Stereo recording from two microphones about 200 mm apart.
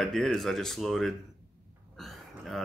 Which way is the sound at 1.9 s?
Centre (ahead or behind).